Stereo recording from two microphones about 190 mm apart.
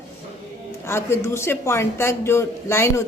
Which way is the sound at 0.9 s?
15° left (ahead or behind).